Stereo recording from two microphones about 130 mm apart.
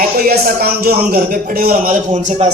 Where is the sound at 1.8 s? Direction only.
70° right (ahead or behind).